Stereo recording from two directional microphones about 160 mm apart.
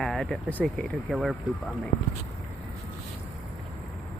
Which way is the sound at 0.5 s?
5° left (ahead or behind).